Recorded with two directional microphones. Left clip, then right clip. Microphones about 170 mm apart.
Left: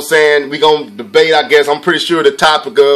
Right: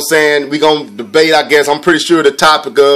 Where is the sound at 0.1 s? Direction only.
35° right (ahead or behind).